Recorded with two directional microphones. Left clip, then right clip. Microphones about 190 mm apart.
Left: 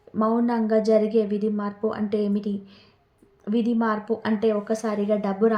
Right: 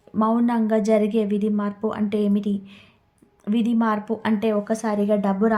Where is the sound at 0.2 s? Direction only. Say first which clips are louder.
Right 2 dB; 30° right (ahead or behind).